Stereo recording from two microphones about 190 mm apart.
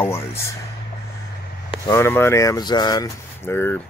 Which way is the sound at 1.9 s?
15° left (ahead or behind).